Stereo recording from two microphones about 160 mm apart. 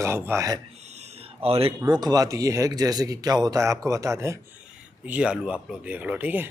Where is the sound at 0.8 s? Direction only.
45° right (ahead or behind).